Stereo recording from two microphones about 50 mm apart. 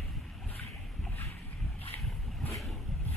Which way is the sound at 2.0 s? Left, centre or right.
Centre.